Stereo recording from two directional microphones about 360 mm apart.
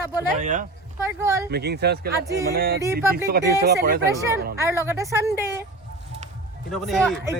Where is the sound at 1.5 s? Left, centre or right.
Right.